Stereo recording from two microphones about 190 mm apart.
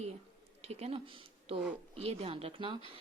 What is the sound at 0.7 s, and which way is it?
Speech, 35° right (ahead or behind).